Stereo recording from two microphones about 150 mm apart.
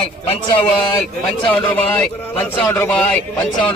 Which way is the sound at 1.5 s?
10° left (ahead or behind).